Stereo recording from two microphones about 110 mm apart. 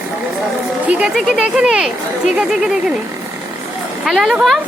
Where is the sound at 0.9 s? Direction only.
10° right (ahead or behind).